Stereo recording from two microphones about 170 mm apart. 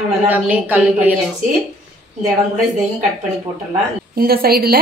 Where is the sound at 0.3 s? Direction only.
10° right (ahead or behind).